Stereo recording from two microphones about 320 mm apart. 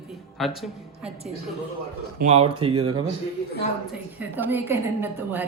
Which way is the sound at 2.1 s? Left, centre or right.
Centre.